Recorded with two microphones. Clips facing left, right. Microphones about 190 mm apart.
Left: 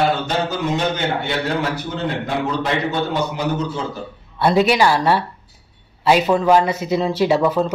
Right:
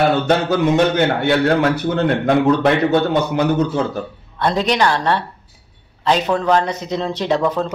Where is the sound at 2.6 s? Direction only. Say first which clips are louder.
Right 6 dB; 60° right (ahead or behind).